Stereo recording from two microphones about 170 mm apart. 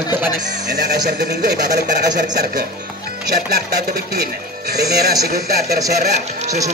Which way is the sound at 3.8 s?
65° right (ahead or behind).